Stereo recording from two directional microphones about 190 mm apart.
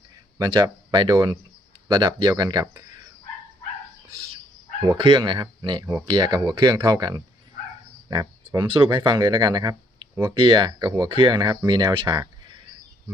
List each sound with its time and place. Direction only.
0.3 s speech: 20° right (ahead or behind)
4.9 s speech: 25° right (ahead or behind)